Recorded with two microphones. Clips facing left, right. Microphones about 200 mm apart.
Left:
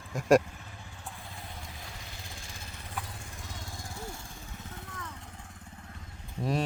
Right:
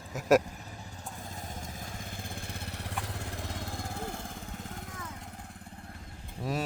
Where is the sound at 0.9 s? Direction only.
40° right (ahead or behind).